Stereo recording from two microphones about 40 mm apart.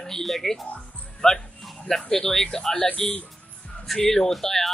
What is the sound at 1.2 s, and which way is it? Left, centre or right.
Speech, centre.